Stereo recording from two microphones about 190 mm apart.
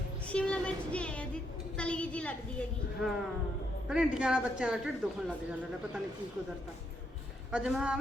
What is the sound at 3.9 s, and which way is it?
Speech, 5° right (ahead or behind).